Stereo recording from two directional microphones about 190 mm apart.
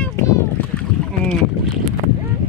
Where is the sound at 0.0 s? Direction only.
15° left (ahead or behind).